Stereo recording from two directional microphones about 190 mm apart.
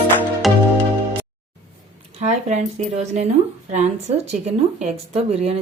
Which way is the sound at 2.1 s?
35° right (ahead or behind).